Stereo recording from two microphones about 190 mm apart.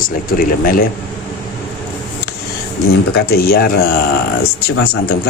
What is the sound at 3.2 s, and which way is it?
Speech, 55° left (ahead or behind).